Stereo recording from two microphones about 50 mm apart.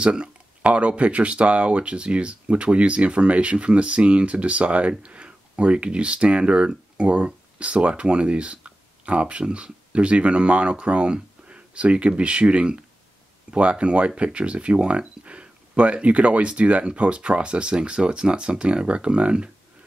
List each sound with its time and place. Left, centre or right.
0.0 s speech: right